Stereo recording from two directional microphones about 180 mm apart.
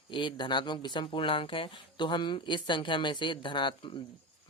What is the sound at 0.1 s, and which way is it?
Speech, 25° left (ahead or behind).